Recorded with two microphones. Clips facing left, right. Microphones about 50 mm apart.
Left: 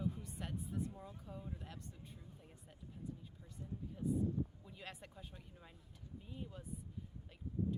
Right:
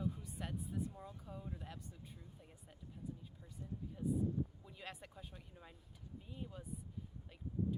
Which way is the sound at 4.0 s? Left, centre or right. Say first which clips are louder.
Even; centre.